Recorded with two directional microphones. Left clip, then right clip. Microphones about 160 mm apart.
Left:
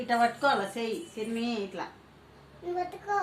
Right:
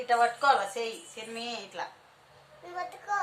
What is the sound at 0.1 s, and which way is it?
Speech, 50° right (ahead or behind).